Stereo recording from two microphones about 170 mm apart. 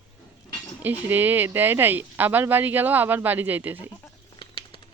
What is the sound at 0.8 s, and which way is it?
Speech, 10° right (ahead or behind).